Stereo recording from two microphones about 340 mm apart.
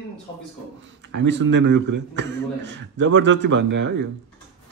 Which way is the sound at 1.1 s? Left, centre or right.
Right.